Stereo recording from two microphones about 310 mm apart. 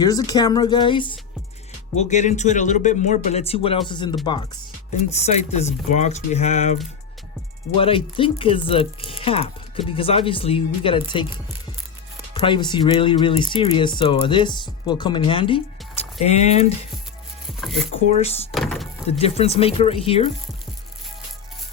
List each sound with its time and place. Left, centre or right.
0.0 s speech: centre
7.8 s speech: centre
12.3 s speech: centre
18.1 s speech: centre
18.5 s music: centre
19.2 s speech: centre